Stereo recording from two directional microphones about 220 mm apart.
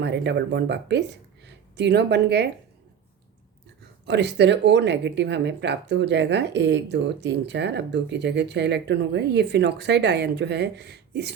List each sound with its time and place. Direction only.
0.0 s speech: 50° right (ahead or behind)
4.0 s speech: 50° right (ahead or behind)